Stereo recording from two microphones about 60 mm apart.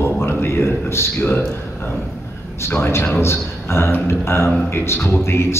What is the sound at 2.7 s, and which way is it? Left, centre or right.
A man's voice, left.